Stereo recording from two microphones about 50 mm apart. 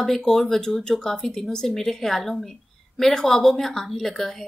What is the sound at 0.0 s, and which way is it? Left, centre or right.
A woman's voice, centre.